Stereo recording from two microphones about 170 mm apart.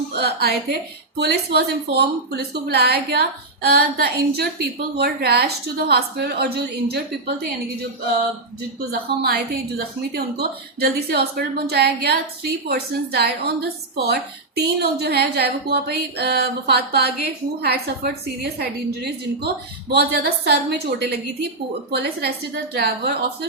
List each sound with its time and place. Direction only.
0.1 s a woman's voice: 70° right (ahead or behind)
8.9 s a woman's voice: 65° right (ahead or behind)
19.9 s a woman's voice: 70° right (ahead or behind)